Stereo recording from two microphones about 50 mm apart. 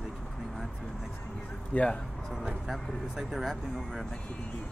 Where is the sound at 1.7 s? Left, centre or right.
Left.